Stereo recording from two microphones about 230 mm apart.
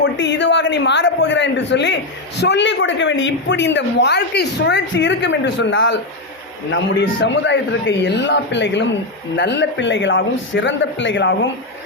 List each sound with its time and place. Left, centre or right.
0.0 s a man's voice: left